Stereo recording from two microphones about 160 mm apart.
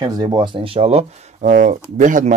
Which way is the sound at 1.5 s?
55° right (ahead or behind).